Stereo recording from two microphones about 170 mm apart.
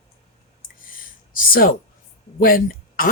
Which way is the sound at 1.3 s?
55° left (ahead or behind).